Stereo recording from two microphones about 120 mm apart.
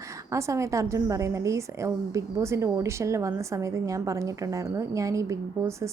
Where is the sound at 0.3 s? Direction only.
25° right (ahead or behind).